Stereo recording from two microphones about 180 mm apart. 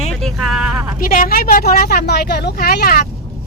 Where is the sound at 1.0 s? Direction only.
50° left (ahead or behind).